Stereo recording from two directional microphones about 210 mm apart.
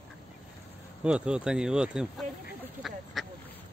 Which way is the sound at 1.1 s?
5° right (ahead or behind).